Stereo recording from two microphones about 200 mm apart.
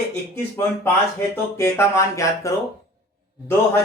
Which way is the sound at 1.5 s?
15° left (ahead or behind).